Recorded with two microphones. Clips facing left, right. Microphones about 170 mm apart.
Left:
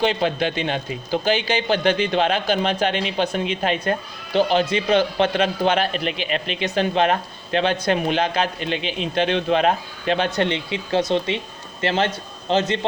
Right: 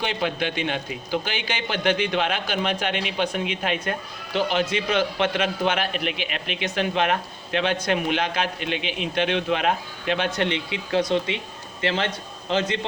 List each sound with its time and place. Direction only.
0.0 s a man's voice: 35° left (ahead or behind)